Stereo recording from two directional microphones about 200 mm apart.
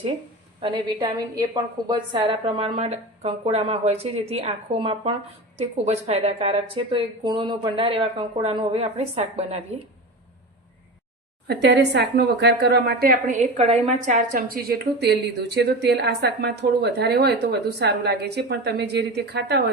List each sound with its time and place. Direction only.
0.6 s speech: 20° right (ahead or behind)
11.4 s a woman's voice: 55° right (ahead or behind)